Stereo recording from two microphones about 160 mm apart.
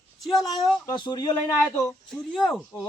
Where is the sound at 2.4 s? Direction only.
Centre (ahead or behind).